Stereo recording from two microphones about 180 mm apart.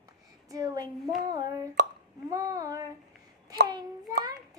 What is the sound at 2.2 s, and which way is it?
Child singing, 20° right (ahead or behind).